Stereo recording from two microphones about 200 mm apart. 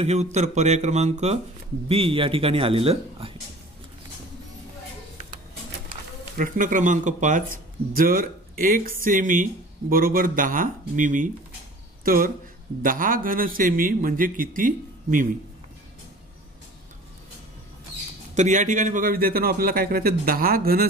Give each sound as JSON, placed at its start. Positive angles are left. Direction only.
{"t": 0.0, "sound": "speech", "side_deg": -35}
{"t": 6.3, "sound": "speech", "side_deg": -45}
{"t": 18.3, "sound": "speech", "side_deg": -40}